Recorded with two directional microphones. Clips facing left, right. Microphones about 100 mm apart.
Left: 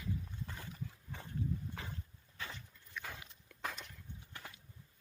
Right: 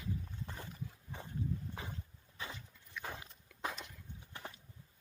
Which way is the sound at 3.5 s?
Centre (ahead or behind).